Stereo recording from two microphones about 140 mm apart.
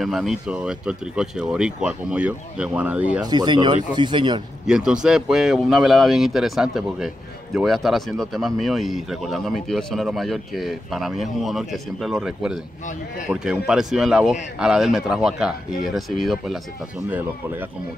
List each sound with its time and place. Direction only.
0.0 s speech: centre (ahead or behind)
3.3 s speech: 30° right (ahead or behind)
4.6 s speech: 5° right (ahead or behind)
17.1 s speech: 15° right (ahead or behind)